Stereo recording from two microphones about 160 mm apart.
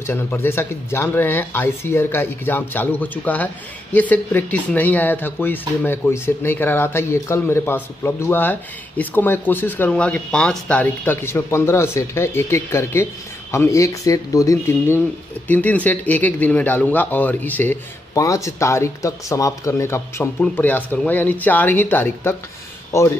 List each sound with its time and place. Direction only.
0.0 s speech: 15° left (ahead or behind)